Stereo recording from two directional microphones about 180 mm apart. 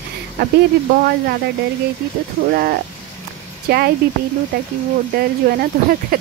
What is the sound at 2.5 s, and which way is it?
Speech, 55° right (ahead or behind).